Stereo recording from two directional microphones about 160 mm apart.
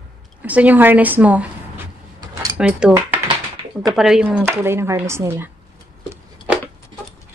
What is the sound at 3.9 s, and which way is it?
Speech, 5° right (ahead or behind).